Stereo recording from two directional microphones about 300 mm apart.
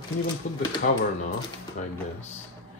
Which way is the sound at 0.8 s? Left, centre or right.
Left.